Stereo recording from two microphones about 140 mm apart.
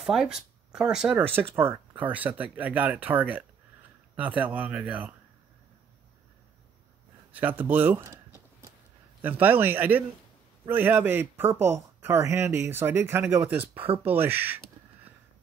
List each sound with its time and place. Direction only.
0.0 s speech: 5° right (ahead or behind)
7.3 s speech: 15° right (ahead or behind)
9.2 s speech: 10° right (ahead or behind)